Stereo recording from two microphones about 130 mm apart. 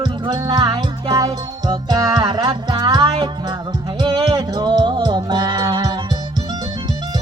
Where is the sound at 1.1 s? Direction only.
25° right (ahead or behind).